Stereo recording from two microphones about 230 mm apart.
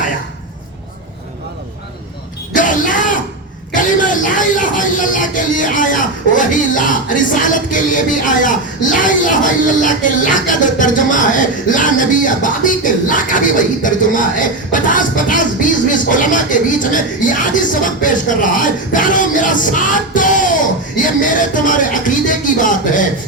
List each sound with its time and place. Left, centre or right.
2.5 s yell: left
3.8 s a sound: left
7.4 s speech: left